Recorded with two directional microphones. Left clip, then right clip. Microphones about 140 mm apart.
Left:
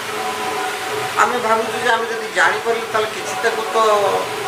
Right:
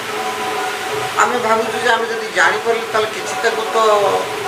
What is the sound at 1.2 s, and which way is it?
A man's voice, 25° right (ahead or behind).